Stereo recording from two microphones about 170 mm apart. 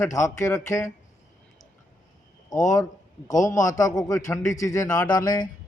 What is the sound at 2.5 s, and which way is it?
Speech, 45° left (ahead or behind).